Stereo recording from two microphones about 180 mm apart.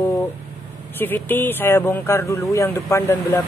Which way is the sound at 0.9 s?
10° left (ahead or behind).